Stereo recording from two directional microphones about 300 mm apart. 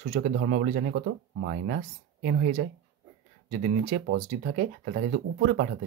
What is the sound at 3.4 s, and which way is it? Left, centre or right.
Speech, right.